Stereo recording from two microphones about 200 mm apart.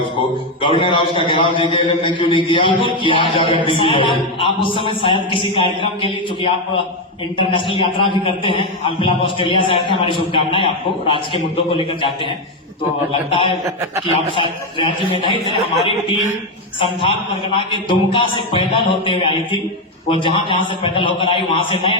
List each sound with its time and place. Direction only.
0.6 s a man's voice: 25° left (ahead or behind)
13.3 s a man's voice: 25° left (ahead or behind)
16.8 s a man's voice: 30° left (ahead or behind)